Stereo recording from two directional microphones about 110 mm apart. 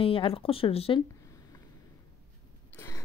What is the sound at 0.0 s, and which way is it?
Speech, 55° left (ahead or behind).